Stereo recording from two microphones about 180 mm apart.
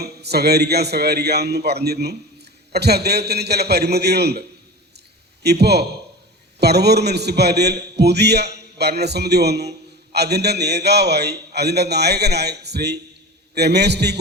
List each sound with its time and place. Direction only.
0.0 s a man's voice: 65° right (ahead or behind)